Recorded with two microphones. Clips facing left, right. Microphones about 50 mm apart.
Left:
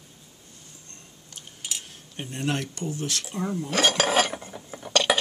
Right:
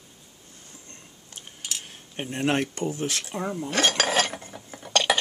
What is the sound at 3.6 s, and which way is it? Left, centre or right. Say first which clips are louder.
Cutlery: left 1 dB; centre.